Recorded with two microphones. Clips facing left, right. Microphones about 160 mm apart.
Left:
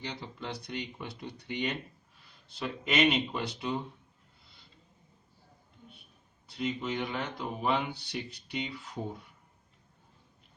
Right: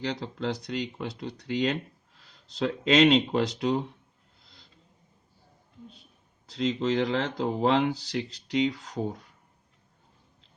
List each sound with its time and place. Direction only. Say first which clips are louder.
0.0 s speech: right 9 dB; 90° right
4.4 s a sound: right 4 dB; 90° right
6.5 s speech: right 7 dB; 90° right